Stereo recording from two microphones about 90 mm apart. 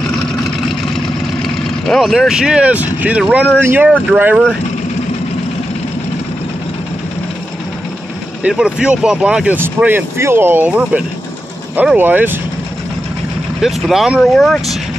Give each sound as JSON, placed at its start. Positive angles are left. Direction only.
{"t": 1.4, "sound": "speech", "side_deg": 0}
{"t": 8.5, "sound": "speech", "side_deg": -10}
{"t": 9.8, "sound": "speech", "side_deg": -20}
{"t": 13.6, "sound": "speech", "side_deg": 0}